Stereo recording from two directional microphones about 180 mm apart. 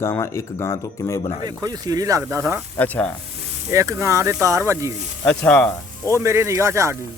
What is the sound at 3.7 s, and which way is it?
Speech, 15° right (ahead or behind).